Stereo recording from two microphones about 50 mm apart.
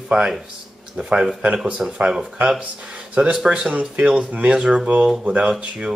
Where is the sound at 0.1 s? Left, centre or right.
Centre.